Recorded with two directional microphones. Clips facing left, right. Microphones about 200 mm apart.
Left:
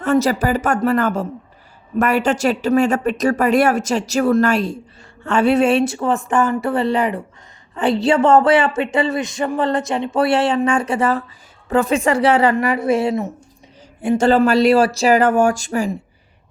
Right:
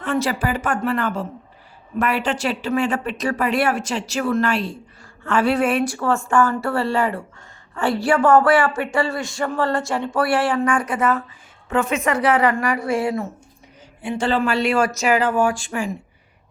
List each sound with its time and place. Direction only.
0.0 s speech: 40° left (ahead or behind)
5.2 s speech: 25° left (ahead or behind)
14.0 s speech: 45° left (ahead or behind)
15.2 s speech: 50° left (ahead or behind)